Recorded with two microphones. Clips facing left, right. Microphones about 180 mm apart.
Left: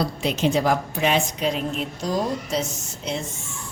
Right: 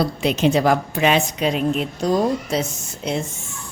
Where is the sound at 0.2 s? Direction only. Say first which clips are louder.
Right 4 dB; 75° right (ahead or behind).